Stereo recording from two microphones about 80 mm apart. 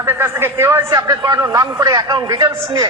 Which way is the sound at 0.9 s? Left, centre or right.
Right.